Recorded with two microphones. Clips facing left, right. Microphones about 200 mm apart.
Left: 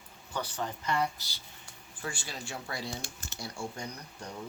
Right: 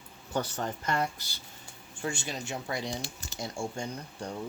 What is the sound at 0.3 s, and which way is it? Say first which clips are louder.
Speech: right 4 dB; 45° right (ahead or behind).